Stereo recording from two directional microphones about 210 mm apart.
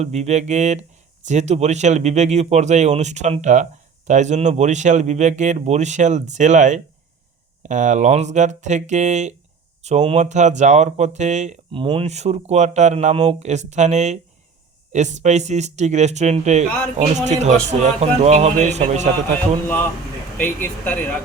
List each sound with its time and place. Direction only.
0.0 s speech: 30° right (ahead or behind)
19.6 s speech: 10° left (ahead or behind)